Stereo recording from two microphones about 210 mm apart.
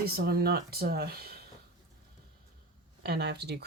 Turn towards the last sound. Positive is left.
turn(degrees=-50)  # may be behind; listen again after turning